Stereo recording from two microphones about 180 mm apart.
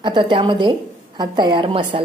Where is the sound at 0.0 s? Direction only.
25° right (ahead or behind).